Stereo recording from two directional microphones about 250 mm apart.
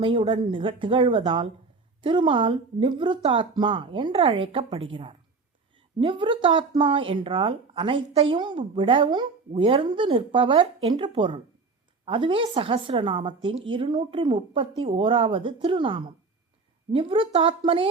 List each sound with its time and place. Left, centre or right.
0.0 s speech: centre